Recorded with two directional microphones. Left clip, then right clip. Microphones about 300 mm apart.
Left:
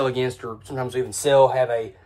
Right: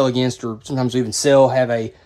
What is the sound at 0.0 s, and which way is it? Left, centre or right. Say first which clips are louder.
Speech: right 5 dB; centre.